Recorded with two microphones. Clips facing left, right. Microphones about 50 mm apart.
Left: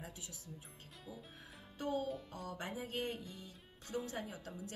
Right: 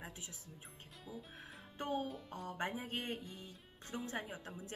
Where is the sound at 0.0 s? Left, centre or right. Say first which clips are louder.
Right 1 dB; right.